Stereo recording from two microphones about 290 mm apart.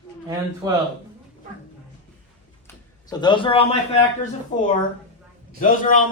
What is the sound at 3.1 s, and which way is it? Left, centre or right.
Speech, centre.